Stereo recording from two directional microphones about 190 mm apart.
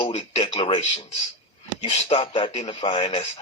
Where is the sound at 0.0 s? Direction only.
30° left (ahead or behind).